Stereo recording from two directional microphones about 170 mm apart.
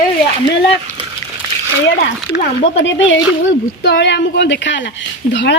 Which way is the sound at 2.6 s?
90° left.